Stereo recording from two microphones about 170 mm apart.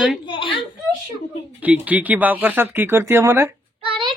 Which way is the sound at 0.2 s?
30° left (ahead or behind).